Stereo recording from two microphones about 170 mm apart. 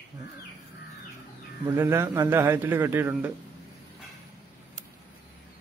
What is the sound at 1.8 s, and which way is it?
Speech, 15° right (ahead or behind).